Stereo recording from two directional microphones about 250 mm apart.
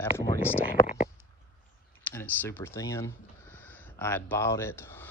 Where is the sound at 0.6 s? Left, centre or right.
Left.